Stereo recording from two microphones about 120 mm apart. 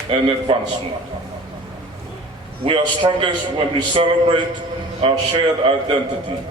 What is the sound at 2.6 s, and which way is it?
A man's voice, 50° right (ahead or behind).